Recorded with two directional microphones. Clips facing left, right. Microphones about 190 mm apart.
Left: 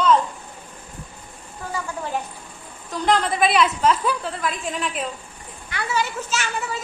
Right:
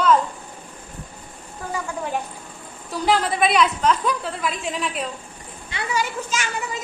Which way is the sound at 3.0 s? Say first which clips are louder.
Even; 5° right (ahead or behind).